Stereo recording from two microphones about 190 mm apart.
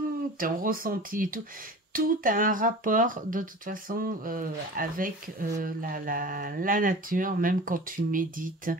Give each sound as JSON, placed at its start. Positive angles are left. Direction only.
{"t": 0.4, "sound": "speech", "side_deg": -50}